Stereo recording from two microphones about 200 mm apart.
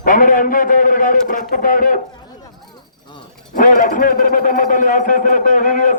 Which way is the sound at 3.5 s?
40° left (ahead or behind).